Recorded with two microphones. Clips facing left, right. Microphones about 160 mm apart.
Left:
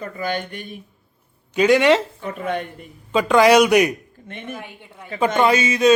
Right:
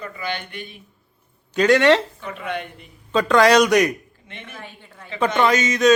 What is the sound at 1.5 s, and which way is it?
Speech, 10° left (ahead or behind).